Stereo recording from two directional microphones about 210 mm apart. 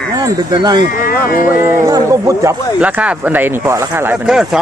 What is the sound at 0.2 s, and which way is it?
Speech, 20° right (ahead or behind).